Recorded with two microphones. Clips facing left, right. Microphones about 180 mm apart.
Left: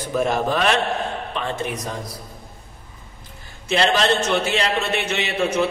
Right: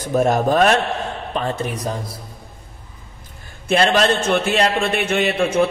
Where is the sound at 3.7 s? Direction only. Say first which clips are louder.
Right 3 dB; 50° right (ahead or behind).